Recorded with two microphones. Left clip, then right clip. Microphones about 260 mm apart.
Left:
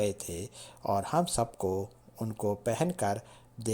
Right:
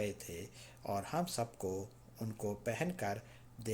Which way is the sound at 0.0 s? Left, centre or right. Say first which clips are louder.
Left 9 dB; left.